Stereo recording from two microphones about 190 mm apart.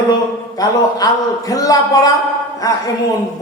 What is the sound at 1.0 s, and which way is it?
Mantra, 20° left (ahead or behind).